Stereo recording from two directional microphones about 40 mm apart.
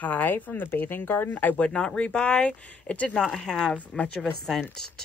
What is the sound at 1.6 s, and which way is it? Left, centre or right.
Speech, left.